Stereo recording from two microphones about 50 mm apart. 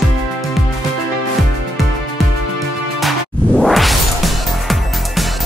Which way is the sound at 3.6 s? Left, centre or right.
Centre.